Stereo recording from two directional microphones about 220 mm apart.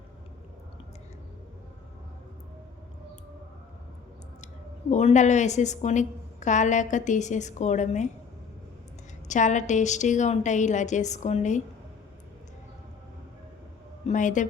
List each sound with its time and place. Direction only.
4.9 s a woman's voice: 30° left (ahead or behind)
9.2 s a woman's voice: 35° left (ahead or behind)
14.1 s a woman's voice: 35° left (ahead or behind)